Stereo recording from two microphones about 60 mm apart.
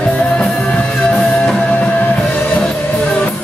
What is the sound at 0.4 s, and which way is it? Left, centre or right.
Music, centre.